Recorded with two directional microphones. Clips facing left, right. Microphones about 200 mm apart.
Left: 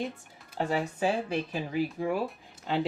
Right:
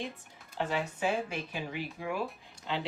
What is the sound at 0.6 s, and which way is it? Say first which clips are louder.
Speech: left 3 dB; 40° left (ahead or behind).